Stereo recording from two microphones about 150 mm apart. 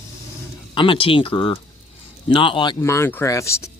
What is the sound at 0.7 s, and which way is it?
Speech, 35° left (ahead or behind).